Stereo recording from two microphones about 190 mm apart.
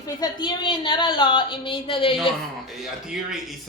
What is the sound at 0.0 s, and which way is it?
A woman's voice, 20° left (ahead or behind).